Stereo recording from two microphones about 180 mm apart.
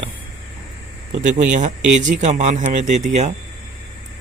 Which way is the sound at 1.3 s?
40° right (ahead or behind).